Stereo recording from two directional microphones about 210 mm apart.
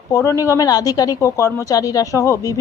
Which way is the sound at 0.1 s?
15° left (ahead or behind).